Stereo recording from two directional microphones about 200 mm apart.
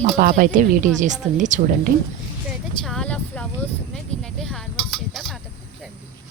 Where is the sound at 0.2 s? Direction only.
45° right (ahead or behind).